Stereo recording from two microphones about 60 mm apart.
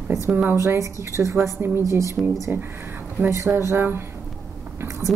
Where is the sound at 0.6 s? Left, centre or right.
Right.